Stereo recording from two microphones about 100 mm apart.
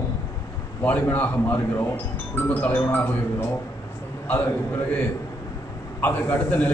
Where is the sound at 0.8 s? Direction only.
20° left (ahead or behind).